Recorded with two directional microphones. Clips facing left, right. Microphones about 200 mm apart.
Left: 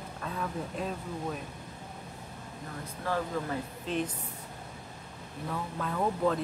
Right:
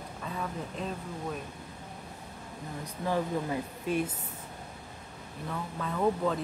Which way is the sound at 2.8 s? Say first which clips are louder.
Right 2 dB; 15° right (ahead or behind).